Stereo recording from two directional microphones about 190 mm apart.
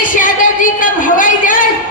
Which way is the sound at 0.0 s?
45° left (ahead or behind).